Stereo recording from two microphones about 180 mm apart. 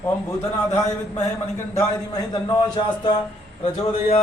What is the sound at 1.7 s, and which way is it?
A man's voice, 20° left (ahead or behind).